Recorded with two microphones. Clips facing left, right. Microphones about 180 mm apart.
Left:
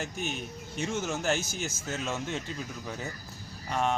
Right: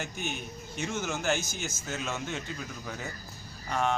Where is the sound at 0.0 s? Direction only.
30° left (ahead or behind).